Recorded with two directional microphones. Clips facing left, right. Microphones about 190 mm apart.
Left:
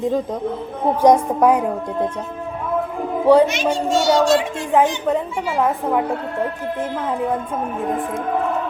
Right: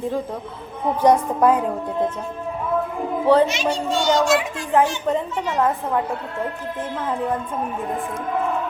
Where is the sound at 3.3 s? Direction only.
10° left (ahead or behind).